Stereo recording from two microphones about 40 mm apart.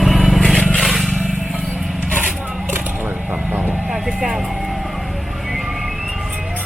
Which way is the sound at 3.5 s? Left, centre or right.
Right.